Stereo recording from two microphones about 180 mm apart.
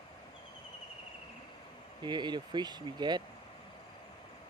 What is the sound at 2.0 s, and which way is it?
Speech, 25° right (ahead or behind).